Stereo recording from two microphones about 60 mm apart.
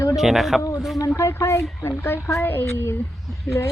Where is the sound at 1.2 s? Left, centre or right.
Left.